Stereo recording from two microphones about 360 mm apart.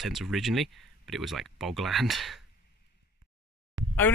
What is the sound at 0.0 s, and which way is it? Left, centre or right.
Speech, centre.